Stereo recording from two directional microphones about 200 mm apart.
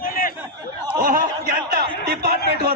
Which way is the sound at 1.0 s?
45° right (ahead or behind).